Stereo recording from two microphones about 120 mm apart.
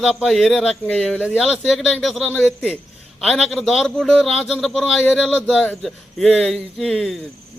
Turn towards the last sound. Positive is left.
turn(degrees=0)  # may be behind; listen again after turning